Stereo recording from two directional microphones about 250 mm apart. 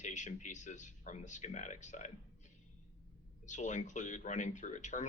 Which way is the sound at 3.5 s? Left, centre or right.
Left.